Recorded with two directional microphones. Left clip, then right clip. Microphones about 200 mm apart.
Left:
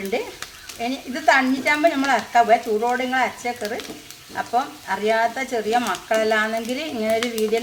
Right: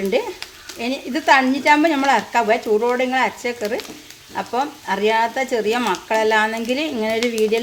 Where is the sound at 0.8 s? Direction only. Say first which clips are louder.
Right 3 dB; 45° right (ahead or behind).